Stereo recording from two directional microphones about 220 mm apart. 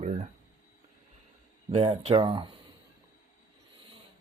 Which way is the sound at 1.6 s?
25° right (ahead or behind).